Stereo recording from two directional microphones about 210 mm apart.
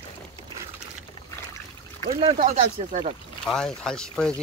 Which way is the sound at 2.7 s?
30° right (ahead or behind).